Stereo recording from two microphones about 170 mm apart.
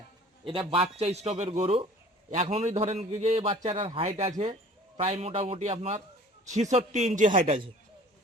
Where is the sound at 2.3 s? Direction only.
40° right (ahead or behind).